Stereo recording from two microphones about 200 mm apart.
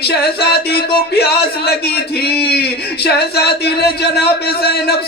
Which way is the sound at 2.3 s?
55° left (ahead or behind).